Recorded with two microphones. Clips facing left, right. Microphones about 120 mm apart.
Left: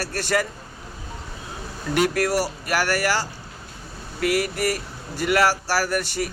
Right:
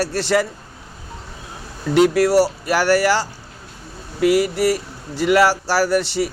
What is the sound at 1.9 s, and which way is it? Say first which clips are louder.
Speech: right 7 dB; 20° right (ahead or behind).